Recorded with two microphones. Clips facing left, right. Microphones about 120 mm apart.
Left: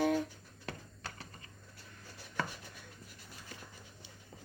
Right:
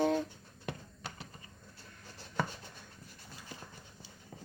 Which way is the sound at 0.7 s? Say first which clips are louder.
Right 2 dB; 15° right (ahead or behind).